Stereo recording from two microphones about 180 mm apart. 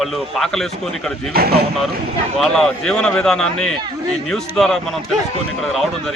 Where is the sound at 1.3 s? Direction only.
60° right (ahead or behind).